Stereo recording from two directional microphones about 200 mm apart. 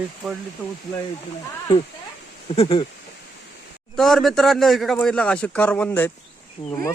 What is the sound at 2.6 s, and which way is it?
Speech, 25° left (ahead or behind).